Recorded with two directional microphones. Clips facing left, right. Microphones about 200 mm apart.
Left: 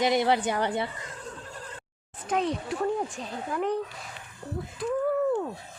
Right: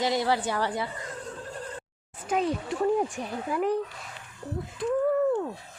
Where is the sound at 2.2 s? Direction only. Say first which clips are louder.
Right 1 dB; 5° right (ahead or behind).